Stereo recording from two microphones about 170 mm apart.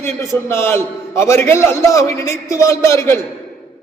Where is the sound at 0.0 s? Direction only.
15° left (ahead or behind).